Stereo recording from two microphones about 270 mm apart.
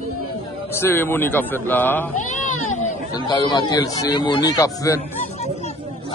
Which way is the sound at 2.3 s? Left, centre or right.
Left.